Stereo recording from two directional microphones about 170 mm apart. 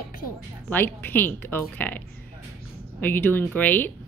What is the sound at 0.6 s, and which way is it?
Speech, 10° left (ahead or behind).